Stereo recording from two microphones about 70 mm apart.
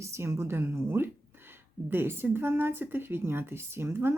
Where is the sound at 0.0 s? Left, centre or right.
Right.